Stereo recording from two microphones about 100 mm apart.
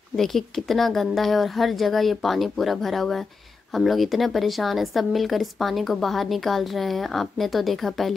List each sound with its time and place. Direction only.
0.1 s speech: 5° left (ahead or behind)